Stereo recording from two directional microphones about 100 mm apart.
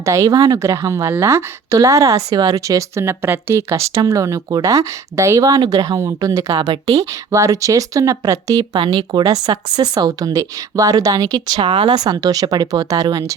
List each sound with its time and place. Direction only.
0.0 s a woman's voice: 35° right (ahead or behind)
8.8 s speech: 55° right (ahead or behind)
9.2 s a woman's voice: 40° right (ahead or behind)